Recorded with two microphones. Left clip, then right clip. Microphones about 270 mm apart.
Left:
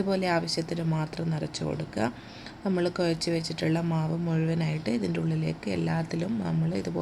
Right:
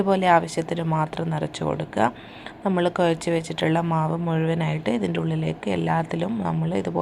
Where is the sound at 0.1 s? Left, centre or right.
Centre.